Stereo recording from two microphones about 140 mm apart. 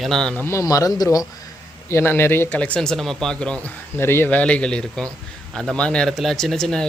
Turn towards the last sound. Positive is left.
turn(degrees=5)  # may be behind; listen again after turning